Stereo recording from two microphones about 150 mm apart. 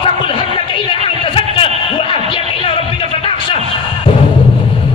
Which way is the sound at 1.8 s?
35° left (ahead or behind).